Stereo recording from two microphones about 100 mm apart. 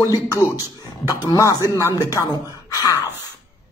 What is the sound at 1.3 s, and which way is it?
Speech, 35° left (ahead or behind).